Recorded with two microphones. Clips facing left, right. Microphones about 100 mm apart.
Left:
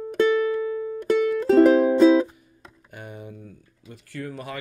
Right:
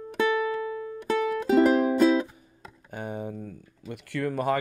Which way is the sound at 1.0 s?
5° right (ahead or behind).